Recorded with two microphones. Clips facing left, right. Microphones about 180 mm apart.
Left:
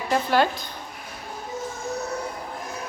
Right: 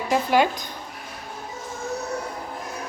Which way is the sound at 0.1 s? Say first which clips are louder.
Right 1 dB; 15° right (ahead or behind).